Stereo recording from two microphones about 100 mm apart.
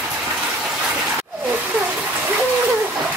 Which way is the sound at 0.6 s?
10° right (ahead or behind).